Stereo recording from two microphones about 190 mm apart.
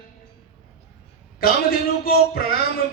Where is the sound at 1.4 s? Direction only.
50° left (ahead or behind).